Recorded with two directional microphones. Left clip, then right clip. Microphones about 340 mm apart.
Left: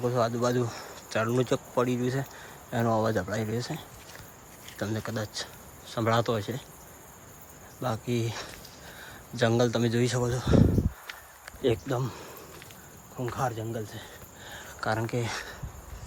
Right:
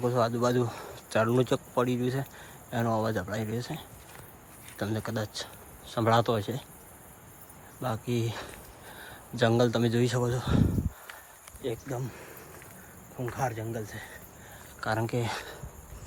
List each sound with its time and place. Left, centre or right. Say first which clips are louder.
0.0 s speech: even; centre
7.8 s speech: left 1 dB; centre
11.6 s speech: left 7 dB; left
13.1 s speech: left 1 dB; centre